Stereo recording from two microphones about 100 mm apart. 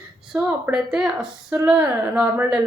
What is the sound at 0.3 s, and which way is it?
A woman's voice, 15° right (ahead or behind).